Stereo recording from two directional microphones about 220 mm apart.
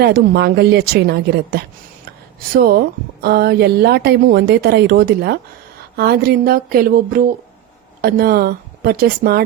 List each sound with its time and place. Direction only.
0.0 s a woman's voice: 45° right (ahead or behind)